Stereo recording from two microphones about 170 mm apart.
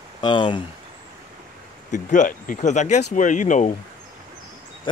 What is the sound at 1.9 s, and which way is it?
Speech, 45° left (ahead or behind).